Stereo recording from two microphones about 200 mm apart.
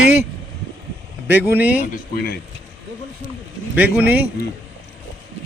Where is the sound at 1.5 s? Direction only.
10° right (ahead or behind).